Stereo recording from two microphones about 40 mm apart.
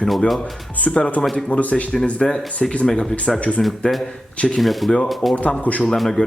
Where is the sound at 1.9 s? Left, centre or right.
Centre; by 3.6 s left.